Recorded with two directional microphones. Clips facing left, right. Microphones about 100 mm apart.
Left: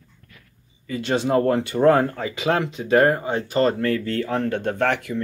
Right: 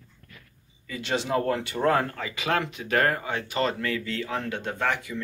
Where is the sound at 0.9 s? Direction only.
45° left (ahead or behind).